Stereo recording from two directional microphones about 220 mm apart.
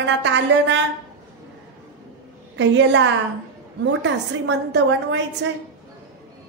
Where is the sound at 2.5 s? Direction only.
55° right (ahead or behind).